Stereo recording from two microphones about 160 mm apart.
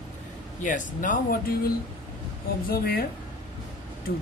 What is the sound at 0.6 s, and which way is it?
Speech, 55° left (ahead or behind).